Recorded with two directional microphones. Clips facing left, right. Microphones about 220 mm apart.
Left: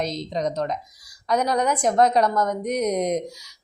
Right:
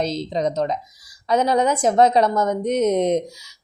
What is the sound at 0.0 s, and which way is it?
A woman's voice, 30° right (ahead or behind).